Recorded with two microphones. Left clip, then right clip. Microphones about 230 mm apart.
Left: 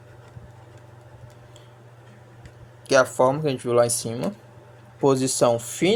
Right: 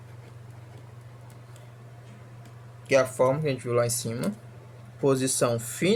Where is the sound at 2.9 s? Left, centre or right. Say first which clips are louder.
Left 4 dB; centre.